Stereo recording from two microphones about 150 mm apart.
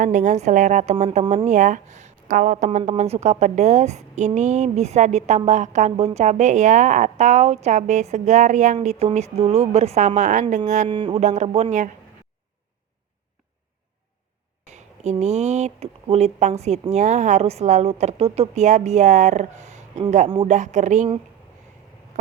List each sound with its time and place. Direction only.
0.0 s speech: 55° right (ahead or behind)
10.8 s a sound: 35° right (ahead or behind)
11.2 s speech: 50° right (ahead or behind)
15.2 s speech: 50° right (ahead or behind)